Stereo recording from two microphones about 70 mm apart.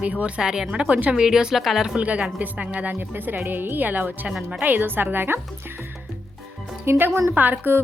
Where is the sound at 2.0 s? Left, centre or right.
Centre.